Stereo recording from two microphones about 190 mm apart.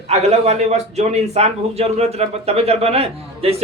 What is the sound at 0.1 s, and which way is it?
Speech, 35° right (ahead or behind).